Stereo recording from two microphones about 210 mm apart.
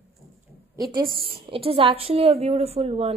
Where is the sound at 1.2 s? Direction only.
25° right (ahead or behind).